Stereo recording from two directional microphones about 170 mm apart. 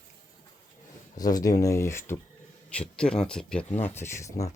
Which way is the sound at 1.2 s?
20° left (ahead or behind).